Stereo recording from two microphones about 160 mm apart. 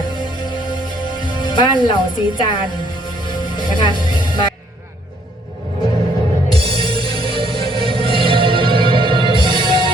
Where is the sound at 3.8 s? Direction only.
30° left (ahead or behind).